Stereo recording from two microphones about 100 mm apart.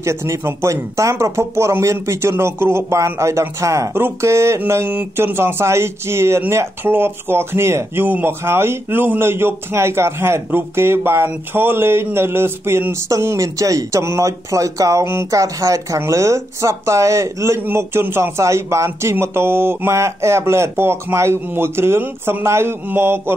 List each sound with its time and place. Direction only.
0.0 s speech: 30° right (ahead or behind)